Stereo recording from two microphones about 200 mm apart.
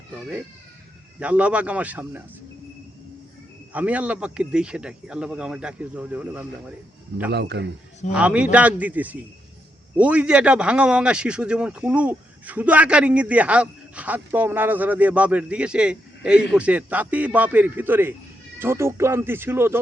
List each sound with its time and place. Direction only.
1.2 s speech: 5° right (ahead or behind)
3.7 s speech: 5° right (ahead or behind)
7.3 s a man's voice: 55° right (ahead or behind)
8.1 s speech: 5° right (ahead or behind)